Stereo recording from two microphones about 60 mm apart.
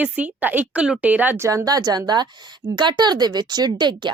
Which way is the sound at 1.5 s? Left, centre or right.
Right.